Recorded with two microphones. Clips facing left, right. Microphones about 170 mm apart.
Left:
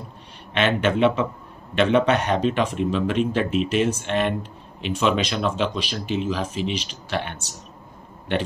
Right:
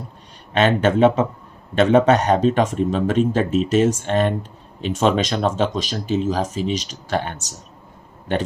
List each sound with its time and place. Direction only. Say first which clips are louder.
0.5 s speech: right 4 dB; 40° right (ahead or behind)